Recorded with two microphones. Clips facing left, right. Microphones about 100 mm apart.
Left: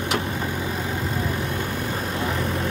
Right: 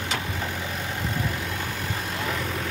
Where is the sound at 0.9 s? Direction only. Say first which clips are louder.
Left 3 dB; 5° left (ahead or behind).